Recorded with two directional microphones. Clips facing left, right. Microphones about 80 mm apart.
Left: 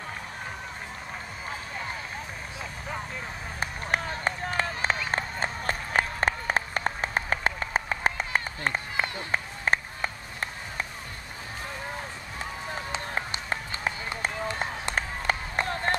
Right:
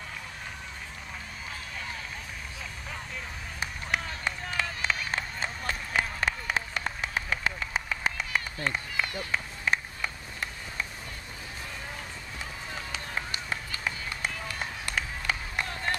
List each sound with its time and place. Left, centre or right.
3.5 s run: left
5.1 s applause: left
14.5 s run: left
15.0 s run: left